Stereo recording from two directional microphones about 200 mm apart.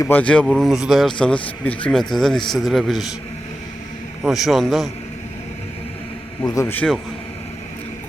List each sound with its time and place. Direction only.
0.0 s speech: 10° left (ahead or behind)
4.2 s speech: centre (ahead or behind)
6.4 s a man's voice: 15° left (ahead or behind)